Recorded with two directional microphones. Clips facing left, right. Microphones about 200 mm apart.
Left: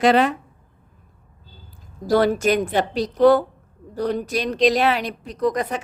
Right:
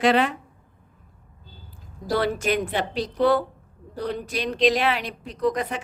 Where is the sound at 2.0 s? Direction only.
45° left (ahead or behind).